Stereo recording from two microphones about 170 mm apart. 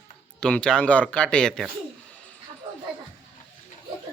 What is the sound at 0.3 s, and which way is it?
Speech, 5° left (ahead or behind).